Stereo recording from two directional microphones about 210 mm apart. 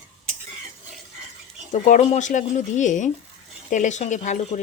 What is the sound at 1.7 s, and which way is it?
Speech, 35° left (ahead or behind).